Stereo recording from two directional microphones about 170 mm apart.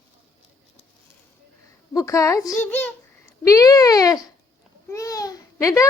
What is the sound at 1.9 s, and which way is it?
A woman's voice, 20° left (ahead or behind).